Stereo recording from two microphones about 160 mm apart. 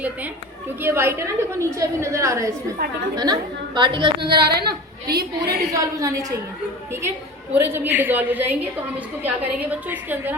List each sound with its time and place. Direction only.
0.8 s a woman's voice: 15° right (ahead or behind)
3.8 s a woman's voice: 30° right (ahead or behind)
4.3 s a woman's voice: 85° right
5.7 s a woman's voice: 20° right (ahead or behind)
7.5 s a woman's voice: 10° right (ahead or behind)